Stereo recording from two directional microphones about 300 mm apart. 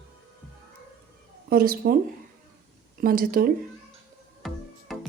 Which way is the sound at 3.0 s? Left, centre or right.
Right.